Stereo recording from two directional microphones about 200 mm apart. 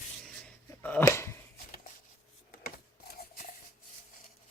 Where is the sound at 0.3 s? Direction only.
5° left (ahead or behind).